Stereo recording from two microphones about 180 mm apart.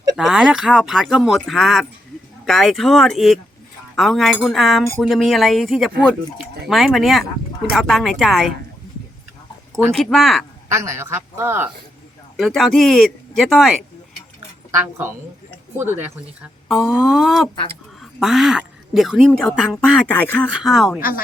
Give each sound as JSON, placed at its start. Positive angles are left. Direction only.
{"t": 0.2, "sound": "speech", "side_deg": -5}
{"t": 9.9, "sound": "speech", "side_deg": 0}
{"t": 10.7, "sound": "a woman's voice", "side_deg": -15}
{"t": 12.4, "sound": "speech", "side_deg": 0}
{"t": 15.8, "sound": "a woman's voice", "side_deg": -10}
{"t": 20.5, "sound": "speech", "side_deg": -5}